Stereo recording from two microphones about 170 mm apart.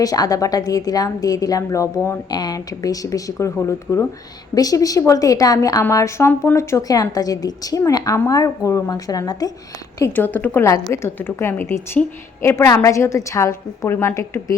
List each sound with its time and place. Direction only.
0.0 s a woman's voice: 20° left (ahead or behind)
10.0 s a woman's voice: 10° left (ahead or behind)